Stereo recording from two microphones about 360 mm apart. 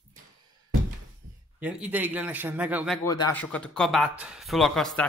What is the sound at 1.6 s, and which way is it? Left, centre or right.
Speech, centre.